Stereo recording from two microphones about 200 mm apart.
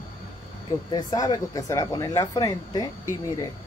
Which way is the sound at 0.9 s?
15° left (ahead or behind).